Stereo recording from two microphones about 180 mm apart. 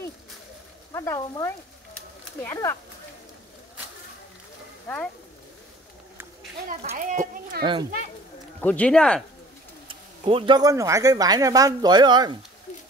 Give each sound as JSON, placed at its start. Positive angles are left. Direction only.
{"t": 0.9, "sound": "frying", "side_deg": 20}
{"t": 2.4, "sound": "speech", "side_deg": 15}
{"t": 4.8, "sound": "speech", "side_deg": 10}
{"t": 6.8, "sound": "speech", "side_deg": -40}
{"t": 7.6, "sound": "speech", "side_deg": -25}
{"t": 8.5, "sound": "speech", "side_deg": 10}
{"t": 9.8, "sound": "speech", "side_deg": -30}